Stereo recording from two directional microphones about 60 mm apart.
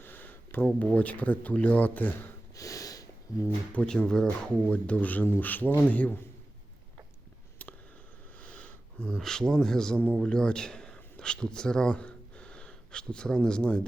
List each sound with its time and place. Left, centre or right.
0.0 s a sound: left
0.6 s speech: left
2.6 s snort: left
3.8 s speech: centre; by 6.1 s left
8.4 s speech: left